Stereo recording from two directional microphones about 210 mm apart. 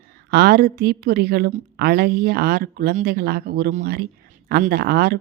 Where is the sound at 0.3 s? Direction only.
50° right (ahead or behind).